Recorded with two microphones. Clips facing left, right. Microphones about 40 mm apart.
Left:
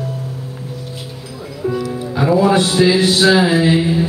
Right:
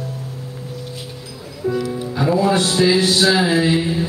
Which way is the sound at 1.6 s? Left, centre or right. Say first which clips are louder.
Left 1 dB; left.